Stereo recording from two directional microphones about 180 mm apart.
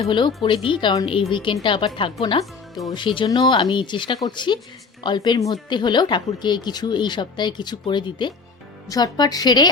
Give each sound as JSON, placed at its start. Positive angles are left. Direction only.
{"t": 0.0, "sound": "a woman's voice", "side_deg": 25}